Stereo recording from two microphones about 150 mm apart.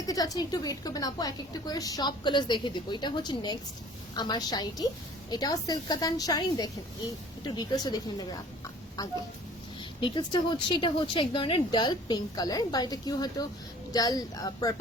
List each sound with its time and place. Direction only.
0.0 s a woman's voice: 25° left (ahead or behind)